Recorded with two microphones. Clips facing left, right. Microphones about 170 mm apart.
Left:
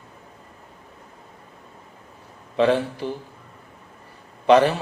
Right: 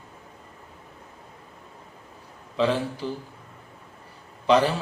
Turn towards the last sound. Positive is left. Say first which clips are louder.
# left 4 dB
turn(degrees=60)  # may be behind; listen again after turning